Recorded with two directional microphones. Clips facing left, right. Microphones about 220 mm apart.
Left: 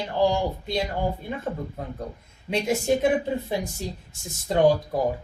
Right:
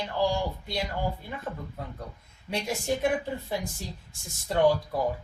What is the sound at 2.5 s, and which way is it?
Speech, 20° left (ahead or behind).